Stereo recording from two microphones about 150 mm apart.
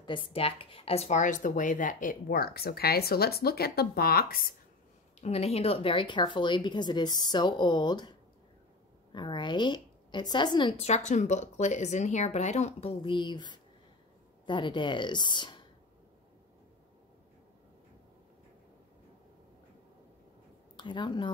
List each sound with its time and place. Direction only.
0.0 s speech: 35° left (ahead or behind); by 4.6 s 80° left
5.2 s speech: 45° left (ahead or behind)
9.1 s a woman's voice: 30° left (ahead or behind)
10.8 s speech: 50° left (ahead or behind); by 15.6 s 30° left (ahead or behind)
20.7 s speech: 30° left (ahead or behind)